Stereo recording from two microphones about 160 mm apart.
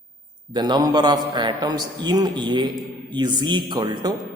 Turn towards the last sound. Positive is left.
turn(degrees=-30)  # may be behind; listen again after turning